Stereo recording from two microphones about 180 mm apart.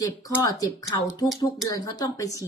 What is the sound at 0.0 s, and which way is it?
Speech, 20° left (ahead or behind).